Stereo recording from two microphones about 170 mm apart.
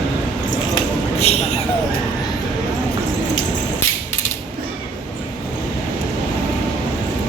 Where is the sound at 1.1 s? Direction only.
40° left (ahead or behind).